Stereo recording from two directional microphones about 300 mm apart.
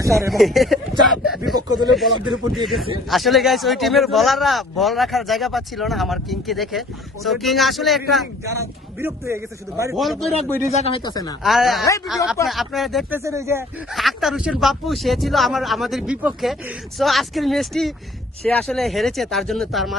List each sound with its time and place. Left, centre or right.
0.3 s speech: centre
10.7 s speech: left
11.4 s speech: centre